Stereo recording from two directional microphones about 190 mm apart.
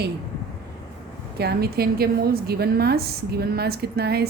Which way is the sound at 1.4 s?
55° right (ahead or behind).